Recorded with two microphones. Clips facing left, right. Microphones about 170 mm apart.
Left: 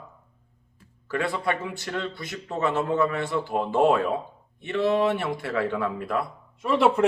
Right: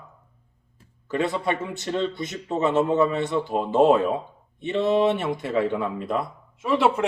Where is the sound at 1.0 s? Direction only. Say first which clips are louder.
Right 2 dB; 20° right (ahead or behind).